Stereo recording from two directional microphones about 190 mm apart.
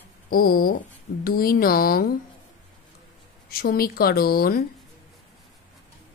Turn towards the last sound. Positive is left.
turn(degrees=50)  # may be behind; listen again after turning